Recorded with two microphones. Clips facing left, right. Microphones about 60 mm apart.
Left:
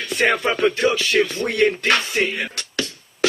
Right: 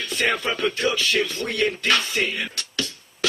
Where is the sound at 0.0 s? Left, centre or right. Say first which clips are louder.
Left 4 dB; left.